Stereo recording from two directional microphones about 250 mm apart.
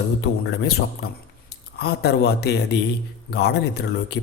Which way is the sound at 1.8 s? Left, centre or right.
Left.